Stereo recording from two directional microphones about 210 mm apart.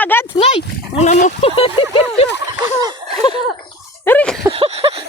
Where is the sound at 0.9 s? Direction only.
35° left (ahead or behind).